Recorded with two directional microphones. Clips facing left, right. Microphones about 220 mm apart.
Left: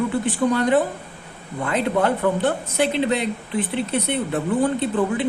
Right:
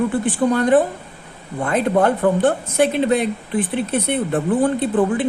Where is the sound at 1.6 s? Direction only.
45° right (ahead or behind).